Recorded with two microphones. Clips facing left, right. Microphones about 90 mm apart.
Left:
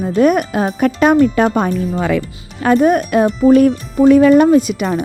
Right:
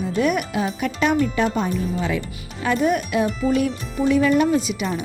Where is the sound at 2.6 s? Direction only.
45° left (ahead or behind).